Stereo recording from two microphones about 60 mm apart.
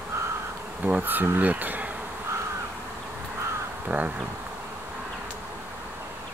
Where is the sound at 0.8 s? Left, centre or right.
Right.